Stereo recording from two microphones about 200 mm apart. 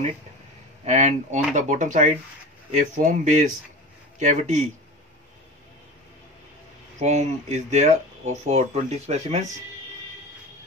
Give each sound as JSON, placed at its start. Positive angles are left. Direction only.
{"t": 0.8, "sound": "speech", "side_deg": -35}
{"t": 7.0, "sound": "speech", "side_deg": -35}